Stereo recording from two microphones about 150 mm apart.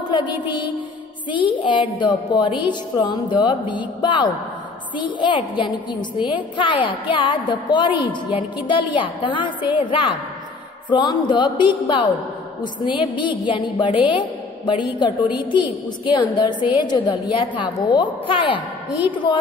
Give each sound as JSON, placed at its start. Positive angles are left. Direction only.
{"t": 0.1, "sound": "a woman's voice", "side_deg": 30}
{"t": 1.3, "sound": "a woman's voice", "side_deg": 30}
{"t": 15.0, "sound": "a woman's voice", "side_deg": -10}
{"t": 16.1, "sound": "a woman's voice", "side_deg": 30}